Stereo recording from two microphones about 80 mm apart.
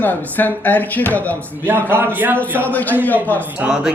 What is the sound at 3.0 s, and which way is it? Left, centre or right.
Speech, left.